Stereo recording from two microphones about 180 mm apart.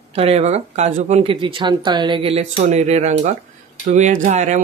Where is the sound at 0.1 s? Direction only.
35° right (ahead or behind).